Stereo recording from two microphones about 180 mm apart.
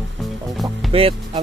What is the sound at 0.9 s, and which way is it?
Speech, 30° right (ahead or behind).